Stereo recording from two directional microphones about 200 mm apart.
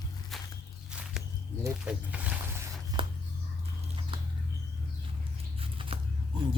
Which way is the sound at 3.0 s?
25° right (ahead or behind).